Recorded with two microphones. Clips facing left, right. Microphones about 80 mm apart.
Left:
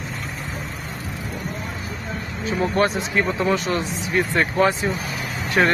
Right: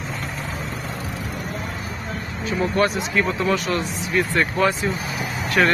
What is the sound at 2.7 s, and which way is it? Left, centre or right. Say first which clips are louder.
Speech: even; left.